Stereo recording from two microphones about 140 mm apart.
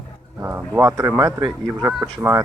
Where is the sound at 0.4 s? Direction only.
15° right (ahead or behind).